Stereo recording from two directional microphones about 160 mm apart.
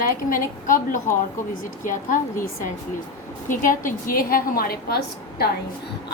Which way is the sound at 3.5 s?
55° left (ahead or behind).